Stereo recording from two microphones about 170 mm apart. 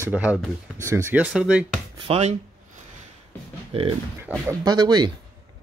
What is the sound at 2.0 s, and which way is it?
Speech, 35° right (ahead or behind).